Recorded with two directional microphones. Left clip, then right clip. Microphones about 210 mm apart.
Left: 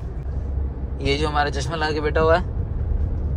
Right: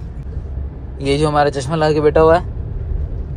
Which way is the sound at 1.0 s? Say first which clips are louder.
Right 6 dB; 5° left (ahead or behind).